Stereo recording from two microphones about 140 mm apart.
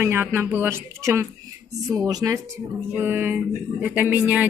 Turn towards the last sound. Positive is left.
turn(degrees=-10)  # may be behind; listen again after turning